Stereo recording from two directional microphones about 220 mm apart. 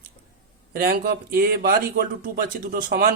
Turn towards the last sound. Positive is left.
turn(degrees=-40)  # may be behind; listen again after turning